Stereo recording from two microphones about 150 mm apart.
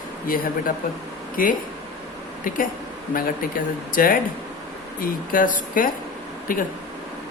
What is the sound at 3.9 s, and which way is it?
Speech, 70° left (ahead or behind).